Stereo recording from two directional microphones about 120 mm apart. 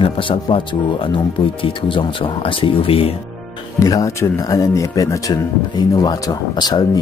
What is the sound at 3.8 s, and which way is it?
Speech, 25° left (ahead or behind).